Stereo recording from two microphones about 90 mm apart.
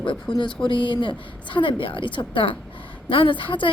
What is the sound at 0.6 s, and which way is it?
A woman's voice, 65° left (ahead or behind).